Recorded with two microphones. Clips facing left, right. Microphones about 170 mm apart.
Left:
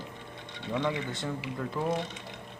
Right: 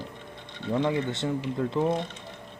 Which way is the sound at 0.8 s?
25° right (ahead or behind).